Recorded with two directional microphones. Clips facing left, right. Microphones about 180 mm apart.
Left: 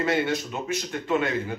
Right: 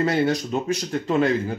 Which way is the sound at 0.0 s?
35° right (ahead or behind).